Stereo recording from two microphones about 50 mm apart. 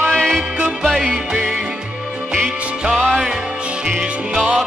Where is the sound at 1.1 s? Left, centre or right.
Centre.